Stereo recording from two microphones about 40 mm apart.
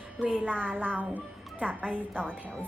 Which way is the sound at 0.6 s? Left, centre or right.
Right.